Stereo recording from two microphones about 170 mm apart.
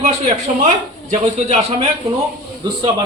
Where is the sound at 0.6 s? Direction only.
45° right (ahead or behind).